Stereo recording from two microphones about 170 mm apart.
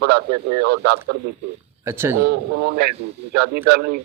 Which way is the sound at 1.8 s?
15° right (ahead or behind).